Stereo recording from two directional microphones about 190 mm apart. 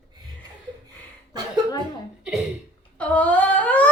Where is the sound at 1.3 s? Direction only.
20° right (ahead or behind).